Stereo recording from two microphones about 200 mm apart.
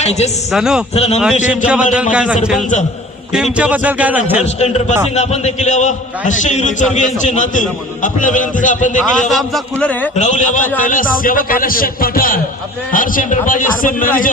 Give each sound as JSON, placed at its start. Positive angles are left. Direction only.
{"t": 0.0, "sound": "speech", "side_deg": 35}
{"t": 0.5, "sound": "a man's voice", "side_deg": -5}
{"t": 0.9, "sound": "a man's voice", "side_deg": 30}
{"t": 1.6, "sound": "a man's voice", "side_deg": -5}
{"t": 4.4, "sound": "a man's voice", "side_deg": 35}
{"t": 9.3, "sound": "a man's voice", "side_deg": 0}
{"t": 10.2, "sound": "a man's voice", "side_deg": 35}